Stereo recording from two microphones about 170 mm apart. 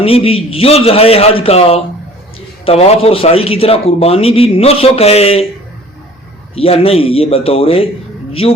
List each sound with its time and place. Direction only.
0.0 s a man's voice: 35° left (ahead or behind)
6.6 s a man's voice: 35° left (ahead or behind)